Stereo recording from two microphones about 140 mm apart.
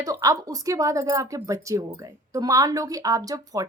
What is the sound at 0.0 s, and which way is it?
Speech, 25° right (ahead or behind).